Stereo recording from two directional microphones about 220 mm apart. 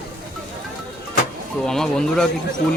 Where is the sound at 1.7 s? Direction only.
5° left (ahead or behind).